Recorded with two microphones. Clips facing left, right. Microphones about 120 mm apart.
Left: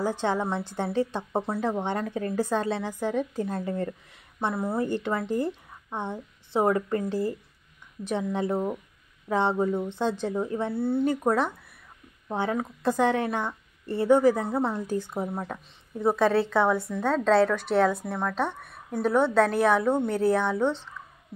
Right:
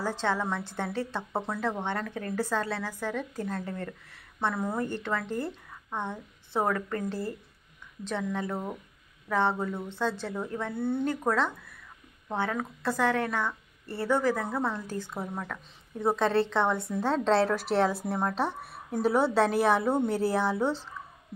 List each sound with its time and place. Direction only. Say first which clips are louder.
0.0 s a woman's voice: left 3 dB; 15° left (ahead or behind)
15.3 s a woman's voice: left 3 dB; 30° left (ahead or behind)
16.0 s a woman's voice: left 3 dB; 5° left (ahead or behind)